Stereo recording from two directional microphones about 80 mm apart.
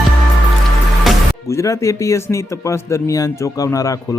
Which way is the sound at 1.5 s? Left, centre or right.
Left.